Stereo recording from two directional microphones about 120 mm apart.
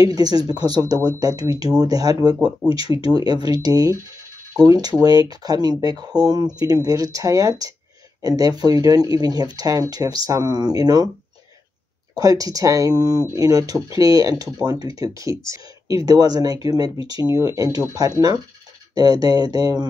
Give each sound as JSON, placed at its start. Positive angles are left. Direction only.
{"t": 0.0, "sound": "speech", "side_deg": -30}
{"t": 2.3, "sound": "speech", "side_deg": -5}
{"t": 2.7, "sound": "speech", "side_deg": -30}
{"t": 12.2, "sound": "speech", "side_deg": -30}
{"t": 18.9, "sound": "speech", "side_deg": -30}